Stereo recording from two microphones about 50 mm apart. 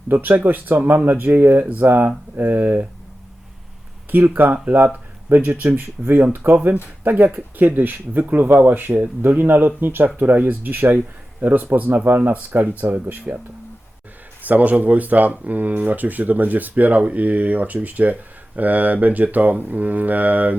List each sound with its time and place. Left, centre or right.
0.1 s speech: right
4.1 s speech: right
14.4 s speech: right